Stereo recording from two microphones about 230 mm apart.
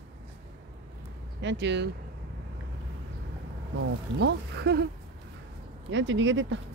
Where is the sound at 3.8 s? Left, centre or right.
Right.